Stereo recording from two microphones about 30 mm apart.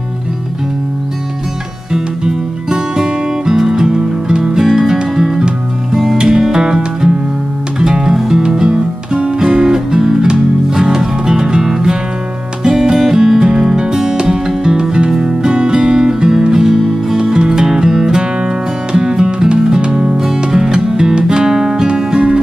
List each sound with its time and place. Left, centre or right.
1.9 s music: right
4.0 s music: right
4.6 s music: centre; by 9.3 s right
9.4 s music: centre
22.1 s music: right